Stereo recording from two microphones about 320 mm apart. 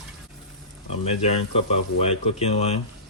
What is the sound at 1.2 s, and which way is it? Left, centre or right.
Speech, centre.